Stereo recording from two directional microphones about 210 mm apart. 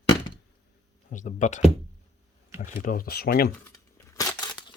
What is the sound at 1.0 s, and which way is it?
Speech, 35° left (ahead or behind).